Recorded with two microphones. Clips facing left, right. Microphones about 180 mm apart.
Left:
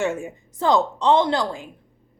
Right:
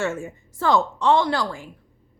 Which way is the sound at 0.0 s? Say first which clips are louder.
Left 2 dB; 15° left (ahead or behind).